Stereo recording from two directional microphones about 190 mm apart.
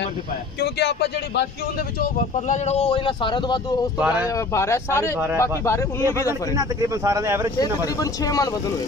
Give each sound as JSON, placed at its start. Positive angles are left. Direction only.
{"t": 0.6, "sound": "speech", "side_deg": 60}
{"t": 2.1, "sound": "speech", "side_deg": 40}
{"t": 4.0, "sound": "speech", "side_deg": -10}
{"t": 4.6, "sound": "speech", "side_deg": 15}
{"t": 6.5, "sound": "speech", "side_deg": -20}
{"t": 7.5, "sound": "speech", "side_deg": 20}